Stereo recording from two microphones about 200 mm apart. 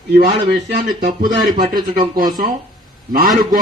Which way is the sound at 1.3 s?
20° right (ahead or behind).